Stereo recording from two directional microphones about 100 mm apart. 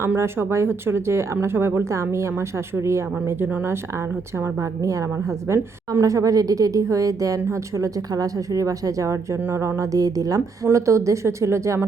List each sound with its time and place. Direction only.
0.0 s speech: 25° right (ahead or behind)
4.6 s a woman's voice: 35° right (ahead or behind)